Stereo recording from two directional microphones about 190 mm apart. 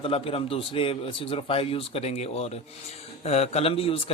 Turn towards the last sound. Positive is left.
turn(degrees=30)  # may be behind; listen again after turning